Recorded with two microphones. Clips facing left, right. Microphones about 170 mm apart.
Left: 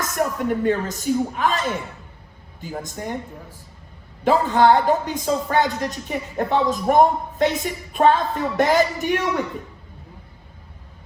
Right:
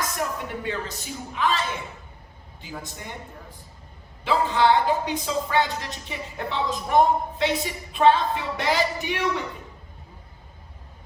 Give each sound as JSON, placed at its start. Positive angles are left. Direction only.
{"t": 0.2, "sound": "a woman's voice", "side_deg": 50}
{"t": 4.2, "sound": "a woman's voice", "side_deg": 45}